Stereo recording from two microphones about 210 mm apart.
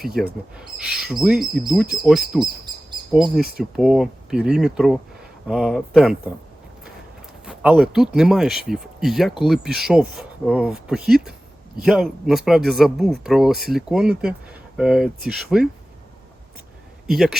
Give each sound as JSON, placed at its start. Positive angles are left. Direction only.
{"t": 0.0, "sound": "speech", "side_deg": 0}
{"t": 2.4, "sound": "bird vocalization", "side_deg": -20}
{"t": 3.8, "sound": "speech", "side_deg": -5}
{"t": 7.4, "sound": "speech", "side_deg": -5}
{"t": 17.1, "sound": "speech", "side_deg": 0}